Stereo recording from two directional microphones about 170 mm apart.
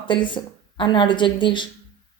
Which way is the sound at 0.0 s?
30° left (ahead or behind).